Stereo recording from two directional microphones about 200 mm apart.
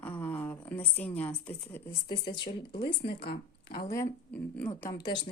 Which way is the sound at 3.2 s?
50° left (ahead or behind).